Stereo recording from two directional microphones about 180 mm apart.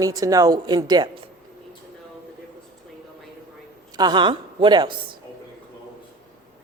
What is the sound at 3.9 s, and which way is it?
A woman's voice, 25° right (ahead or behind).